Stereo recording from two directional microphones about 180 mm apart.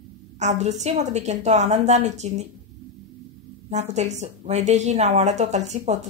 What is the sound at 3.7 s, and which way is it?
Speech, 40° right (ahead or behind).